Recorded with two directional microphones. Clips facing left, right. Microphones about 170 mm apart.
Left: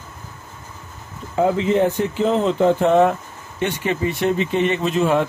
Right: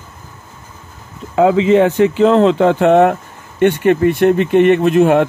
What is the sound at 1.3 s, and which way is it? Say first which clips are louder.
Speech: right 7 dB; 90° right.